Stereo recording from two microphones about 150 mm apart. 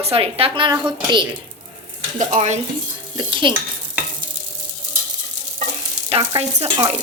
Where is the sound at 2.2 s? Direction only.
55° right (ahead or behind).